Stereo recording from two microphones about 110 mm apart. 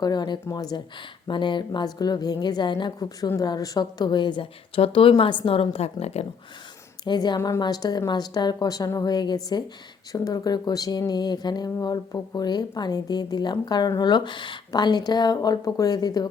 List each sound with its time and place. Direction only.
0.0 s a woman's voice: 40° left (ahead or behind)
3.2 s a woman's voice: 30° left (ahead or behind); by 6.2 s 70° left (ahead or behind)
7.0 s speech: 40° left (ahead or behind)